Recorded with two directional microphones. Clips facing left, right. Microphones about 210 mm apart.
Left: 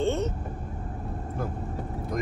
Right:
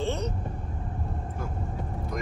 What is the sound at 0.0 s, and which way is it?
Vehicle, centre (ahead or behind).